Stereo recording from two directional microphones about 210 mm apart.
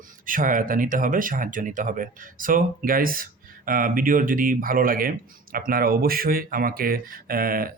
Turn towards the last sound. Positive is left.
turn(degrees=-45)  # may be behind; listen again after turning